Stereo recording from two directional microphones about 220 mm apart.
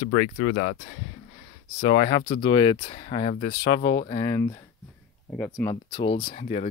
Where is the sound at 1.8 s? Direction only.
25° left (ahead or behind).